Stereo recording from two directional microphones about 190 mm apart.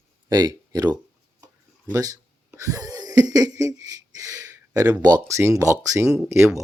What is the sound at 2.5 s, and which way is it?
Wheeze, 15° right (ahead or behind).